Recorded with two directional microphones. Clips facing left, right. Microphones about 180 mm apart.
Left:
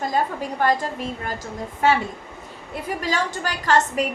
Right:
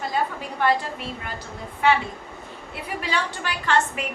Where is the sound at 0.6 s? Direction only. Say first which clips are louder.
Left 1 dB; 40° left (ahead or behind).